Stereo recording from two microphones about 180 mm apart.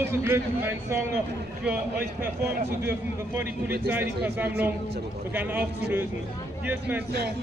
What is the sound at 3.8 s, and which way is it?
Speech, 10° right (ahead or behind).